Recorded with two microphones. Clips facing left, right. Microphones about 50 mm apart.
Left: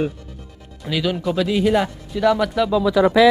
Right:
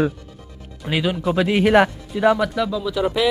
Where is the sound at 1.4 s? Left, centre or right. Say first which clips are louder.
Right 4 dB; right.